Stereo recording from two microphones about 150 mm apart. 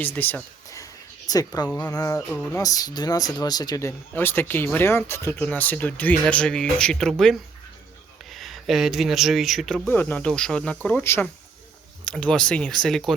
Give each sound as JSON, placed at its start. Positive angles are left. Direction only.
{"t": 0.0, "sound": "speech", "side_deg": 10}
{"t": 2.6, "sound": "speech", "side_deg": 25}